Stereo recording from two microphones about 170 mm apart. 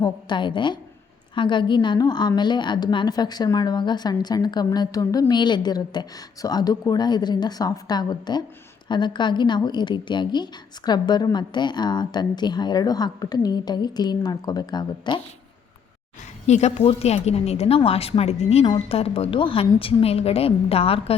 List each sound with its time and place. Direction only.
0.0 s a woman's voice: 25° left (ahead or behind)
16.5 s a woman's voice: 40° left (ahead or behind)